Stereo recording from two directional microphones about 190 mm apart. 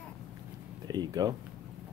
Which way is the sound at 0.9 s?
20° right (ahead or behind).